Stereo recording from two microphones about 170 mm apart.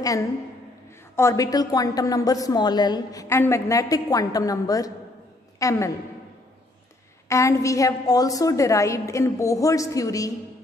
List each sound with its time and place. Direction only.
1.1 s a woman's voice: 20° left (ahead or behind)
7.2 s a woman's voice: 15° left (ahead or behind)